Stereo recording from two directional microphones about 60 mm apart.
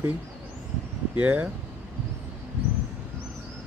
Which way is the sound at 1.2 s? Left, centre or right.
Right.